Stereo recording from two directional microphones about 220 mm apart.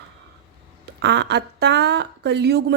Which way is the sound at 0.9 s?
50° right (ahead or behind).